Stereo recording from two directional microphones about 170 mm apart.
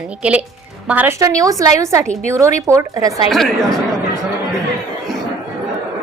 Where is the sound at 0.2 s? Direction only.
10° right (ahead or behind).